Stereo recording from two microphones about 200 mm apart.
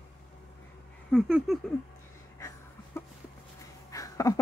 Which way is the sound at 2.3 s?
15° left (ahead or behind).